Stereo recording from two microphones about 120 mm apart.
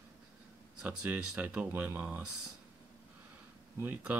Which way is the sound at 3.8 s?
15° right (ahead or behind).